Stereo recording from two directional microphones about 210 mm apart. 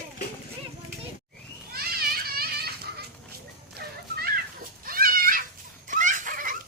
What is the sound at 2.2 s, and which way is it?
Children playing, 45° right (ahead or behind).